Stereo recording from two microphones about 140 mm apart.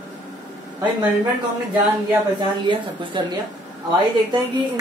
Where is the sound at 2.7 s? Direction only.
35° right (ahead or behind).